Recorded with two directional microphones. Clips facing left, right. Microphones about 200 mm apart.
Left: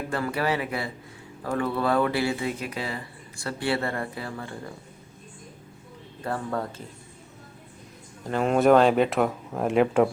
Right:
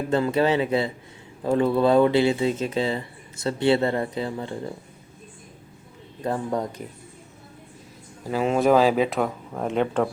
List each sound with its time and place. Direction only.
0.1 s speech: 20° right (ahead or behind)
6.2 s speech: 15° right (ahead or behind)
8.2 s speech: 5° right (ahead or behind)